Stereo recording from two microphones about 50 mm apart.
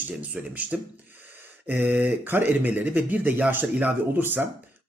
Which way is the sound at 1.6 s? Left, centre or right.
Right.